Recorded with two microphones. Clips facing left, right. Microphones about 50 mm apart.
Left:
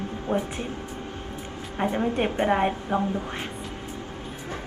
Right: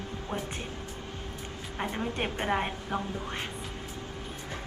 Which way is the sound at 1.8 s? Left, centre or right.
Centre.